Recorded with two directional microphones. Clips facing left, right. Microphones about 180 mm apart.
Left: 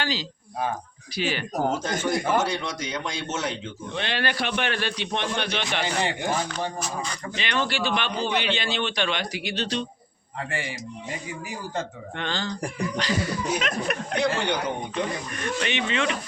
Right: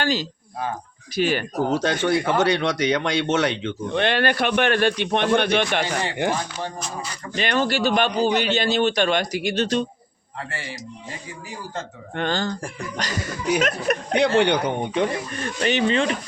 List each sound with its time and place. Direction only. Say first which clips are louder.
0.0 s a man's voice: right 5 dB; 50° right (ahead or behind)
1.7 s speech: right 5 dB; 70° right (ahead or behind)
7.3 s a man's voice: right 6 dB; 45° right (ahead or behind)
12.1 s a man's voice: right 6 dB; 45° right (ahead or behind)
14.2 s speech: right 7 dB; 65° right (ahead or behind)
15.4 s speech: right 6 dB; 35° right (ahead or behind)